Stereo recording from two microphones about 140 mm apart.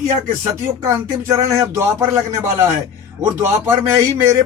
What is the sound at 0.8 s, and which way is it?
A man's voice, 25° right (ahead or behind).